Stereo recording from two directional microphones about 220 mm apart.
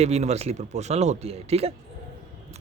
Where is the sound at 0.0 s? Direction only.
30° right (ahead or behind).